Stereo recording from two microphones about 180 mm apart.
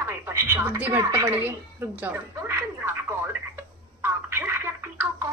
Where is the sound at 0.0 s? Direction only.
15° right (ahead or behind).